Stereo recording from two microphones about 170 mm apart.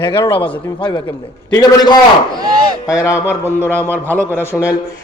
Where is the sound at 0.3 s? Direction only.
30° left (ahead or behind).